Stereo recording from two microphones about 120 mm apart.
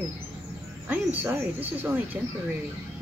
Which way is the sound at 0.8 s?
15° right (ahead or behind).